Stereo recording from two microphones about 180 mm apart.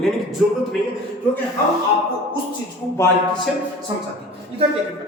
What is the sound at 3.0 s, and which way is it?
Speech, 15° left (ahead or behind).